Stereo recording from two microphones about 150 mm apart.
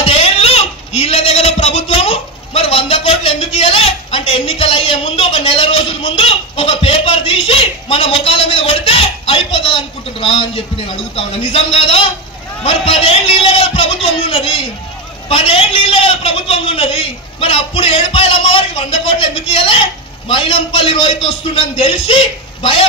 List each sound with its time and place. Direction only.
0.0 s a man's voice: 40° left (ahead or behind)
15.2 s a man's voice: 40° left (ahead or behind)